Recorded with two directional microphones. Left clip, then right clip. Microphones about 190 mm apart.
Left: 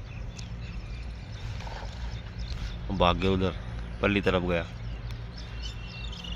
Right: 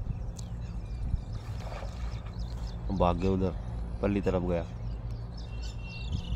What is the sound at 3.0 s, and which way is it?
Speech, 5° right (ahead or behind).